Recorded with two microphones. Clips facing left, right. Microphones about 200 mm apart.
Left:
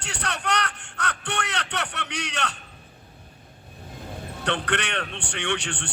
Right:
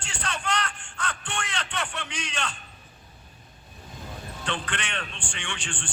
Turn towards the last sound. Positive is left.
turn(degrees=65)  # may be behind; listen again after turning